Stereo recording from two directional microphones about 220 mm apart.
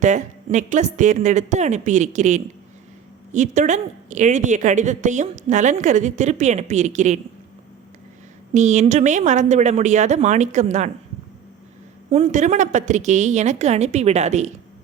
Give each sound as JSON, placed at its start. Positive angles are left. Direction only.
{"t": 0.0, "sound": "a woman's voice", "side_deg": -35}
{"t": 8.5, "sound": "a woman's voice", "side_deg": -30}
{"t": 12.1, "sound": "a woman's voice", "side_deg": -30}